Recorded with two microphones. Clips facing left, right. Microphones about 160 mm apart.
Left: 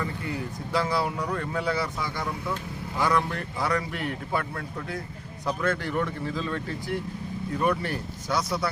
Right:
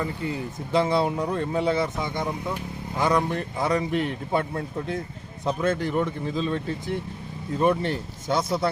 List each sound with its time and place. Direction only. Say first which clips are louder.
0.0 s speech: right 3 dB; 20° right (ahead or behind)